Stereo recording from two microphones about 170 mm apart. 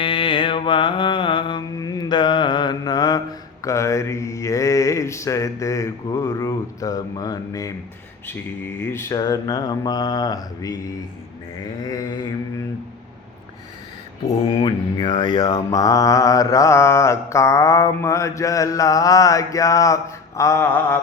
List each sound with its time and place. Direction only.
0.0 s mantra: 30° left (ahead or behind)
8.8 s mantra: 15° left (ahead or behind)
11.8 s mantra: 20° left (ahead or behind)
14.6 s mantra: 30° left (ahead or behind)